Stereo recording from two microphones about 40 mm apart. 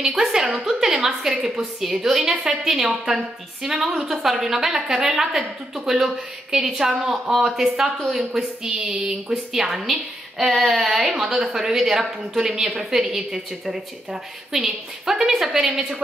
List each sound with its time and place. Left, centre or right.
0.0 s speech: centre
1.9 s a woman's voice: centre
9.5 s speech: centre